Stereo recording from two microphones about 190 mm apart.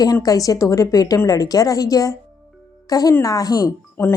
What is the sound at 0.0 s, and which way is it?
A woman's voice, 20° left (ahead or behind).